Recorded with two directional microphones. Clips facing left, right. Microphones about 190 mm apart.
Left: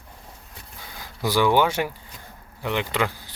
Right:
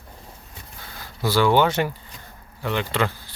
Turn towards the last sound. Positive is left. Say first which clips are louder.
# right 1 dB
turn(degrees=15)  # may be behind; listen again after turning